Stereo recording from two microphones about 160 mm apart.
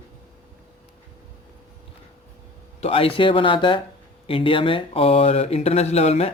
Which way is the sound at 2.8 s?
35° left (ahead or behind).